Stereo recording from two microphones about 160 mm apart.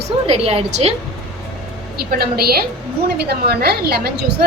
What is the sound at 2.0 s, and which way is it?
Speech, 75° right (ahead or behind).